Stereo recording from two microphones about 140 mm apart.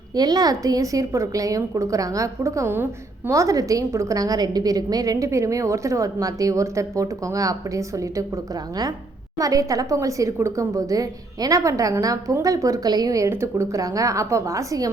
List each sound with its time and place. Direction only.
0.2 s a woman's voice: 30° right (ahead or behind)
9.4 s a woman's voice: 25° right (ahead or behind)